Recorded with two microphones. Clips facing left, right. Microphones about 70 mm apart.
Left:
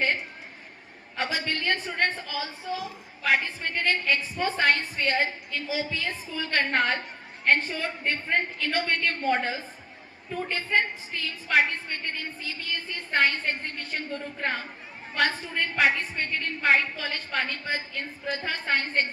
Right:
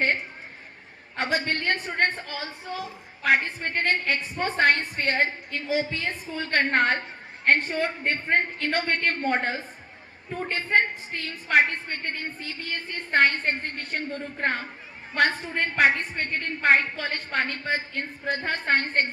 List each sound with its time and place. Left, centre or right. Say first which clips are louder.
1.1 s a woman's voice: right 3 dB; right